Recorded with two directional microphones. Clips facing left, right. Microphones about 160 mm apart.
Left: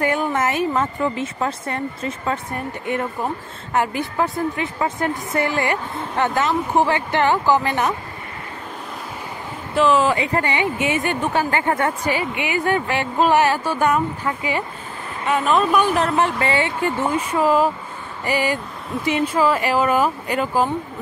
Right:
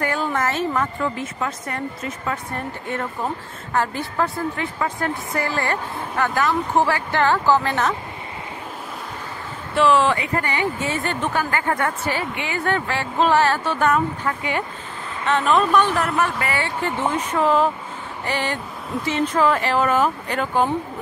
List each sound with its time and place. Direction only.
0.0 s a woman's voice: 20° left (ahead or behind)
3.7 s a woman's voice: 15° left (ahead or behind)
9.8 s speech: centre (ahead or behind)
10.1 s a woman's voice: 20° left (ahead or behind)
16.0 s a woman's voice: 25° left (ahead or behind)
16.8 s speech: 10° left (ahead or behind)